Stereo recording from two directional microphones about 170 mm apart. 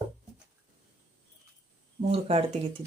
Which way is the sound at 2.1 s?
35° right (ahead or behind).